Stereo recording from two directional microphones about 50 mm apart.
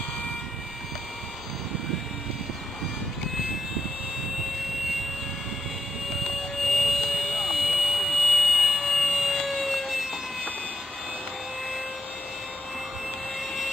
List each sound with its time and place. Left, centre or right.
6.6 s vehicle: centre